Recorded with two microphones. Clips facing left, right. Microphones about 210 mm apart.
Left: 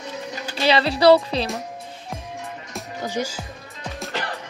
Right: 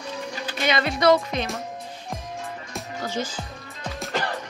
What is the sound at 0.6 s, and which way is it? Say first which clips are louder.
Speech: left 5 dB; 30° left (ahead or behind).